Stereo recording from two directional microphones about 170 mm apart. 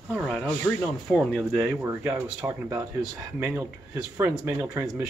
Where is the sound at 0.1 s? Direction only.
Centre (ahead or behind).